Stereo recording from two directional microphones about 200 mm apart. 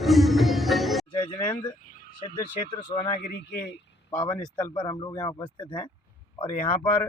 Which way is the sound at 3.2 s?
55° left (ahead or behind).